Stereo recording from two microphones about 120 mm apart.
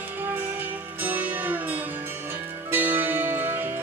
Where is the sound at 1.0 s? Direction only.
15° right (ahead or behind).